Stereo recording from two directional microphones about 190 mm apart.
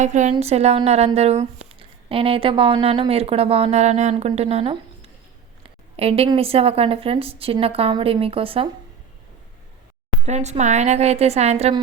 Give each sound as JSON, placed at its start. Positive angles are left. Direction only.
{"t": 0.0, "sound": "a woman's voice", "side_deg": -40}
{"t": 10.2, "sound": "speech", "side_deg": -35}